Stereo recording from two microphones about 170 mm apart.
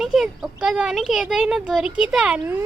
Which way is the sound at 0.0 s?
5° right (ahead or behind).